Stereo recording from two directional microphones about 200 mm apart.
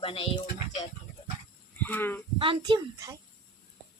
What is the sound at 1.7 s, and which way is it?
Speech, 10° left (ahead or behind).